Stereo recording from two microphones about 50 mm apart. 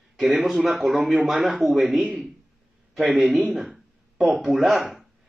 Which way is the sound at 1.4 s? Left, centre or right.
Centre.